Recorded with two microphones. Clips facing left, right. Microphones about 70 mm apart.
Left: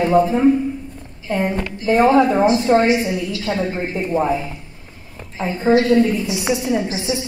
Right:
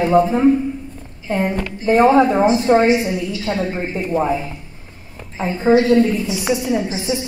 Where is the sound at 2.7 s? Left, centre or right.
Right.